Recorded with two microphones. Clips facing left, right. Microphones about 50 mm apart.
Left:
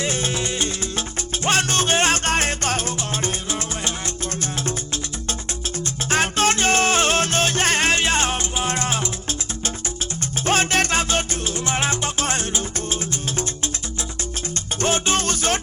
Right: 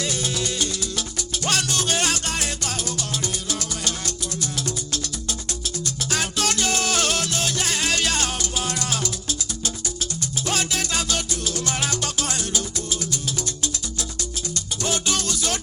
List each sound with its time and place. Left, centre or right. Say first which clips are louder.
0.0 s music: left 2 dB; left
3.2 s music: left 3 dB; left
6.1 s music: left 6 dB; left
10.4 s music: left 7 dB; left
14.8 s music: left 5 dB; left